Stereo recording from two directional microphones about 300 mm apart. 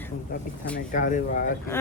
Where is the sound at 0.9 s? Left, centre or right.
Left.